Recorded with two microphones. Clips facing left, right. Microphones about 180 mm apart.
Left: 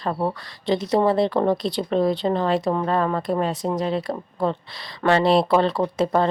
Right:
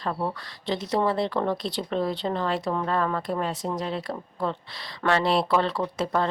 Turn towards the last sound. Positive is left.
turn(degrees=25)  # may be behind; listen again after turning